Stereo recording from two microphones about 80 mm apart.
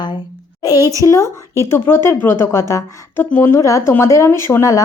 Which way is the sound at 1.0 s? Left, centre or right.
Left.